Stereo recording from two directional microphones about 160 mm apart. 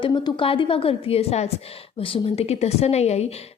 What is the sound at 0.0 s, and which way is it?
A woman's voice, 30° left (ahead or behind).